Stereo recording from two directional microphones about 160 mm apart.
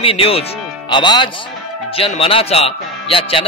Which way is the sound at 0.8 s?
25° left (ahead or behind).